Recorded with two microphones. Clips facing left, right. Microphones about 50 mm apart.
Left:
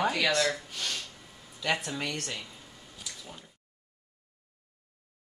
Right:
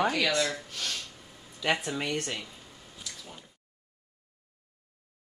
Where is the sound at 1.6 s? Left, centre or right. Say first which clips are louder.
Right 2 dB; centre.